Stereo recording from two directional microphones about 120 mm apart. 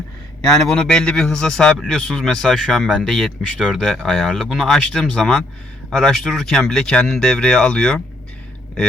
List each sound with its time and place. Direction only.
0.4 s a man's voice: 5° left (ahead or behind)